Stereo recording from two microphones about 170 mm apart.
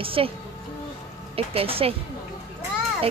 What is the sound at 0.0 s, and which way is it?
Speech, 30° right (ahead or behind).